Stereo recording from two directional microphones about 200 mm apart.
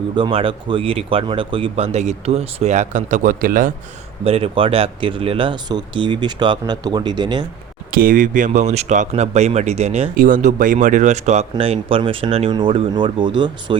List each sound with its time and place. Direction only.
0.2 s speech: 25° right (ahead or behind); by 3.7 s 45° right (ahead or behind)
4.2 s speech: 30° right (ahead or behind)
7.9 s speech: 45° right (ahead or behind); by 13.7 s 25° right (ahead or behind)